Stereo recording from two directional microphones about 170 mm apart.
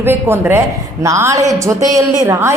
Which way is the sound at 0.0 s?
15° right (ahead or behind).